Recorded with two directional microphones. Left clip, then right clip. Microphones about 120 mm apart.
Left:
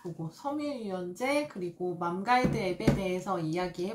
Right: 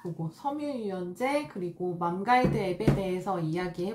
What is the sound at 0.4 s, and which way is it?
Speech, centre (ahead or behind).